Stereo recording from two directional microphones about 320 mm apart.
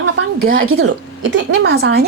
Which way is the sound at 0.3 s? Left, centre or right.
Right.